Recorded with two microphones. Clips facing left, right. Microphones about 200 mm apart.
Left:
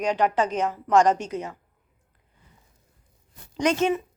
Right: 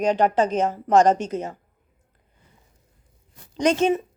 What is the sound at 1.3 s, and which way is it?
Speech, 40° right (ahead or behind).